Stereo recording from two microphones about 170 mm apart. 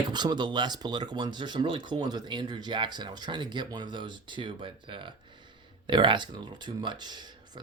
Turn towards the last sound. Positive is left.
turn(degrees=-25)  # may be behind; listen again after turning